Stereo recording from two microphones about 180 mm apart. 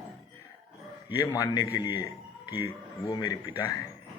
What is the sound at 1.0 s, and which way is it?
Speech, 20° left (ahead or behind).